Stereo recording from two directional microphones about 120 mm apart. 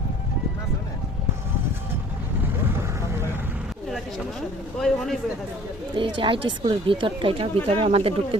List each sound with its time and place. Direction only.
4.8 s a man's voice: 5° left (ahead or behind)
5.9 s speech: 45° right (ahead or behind)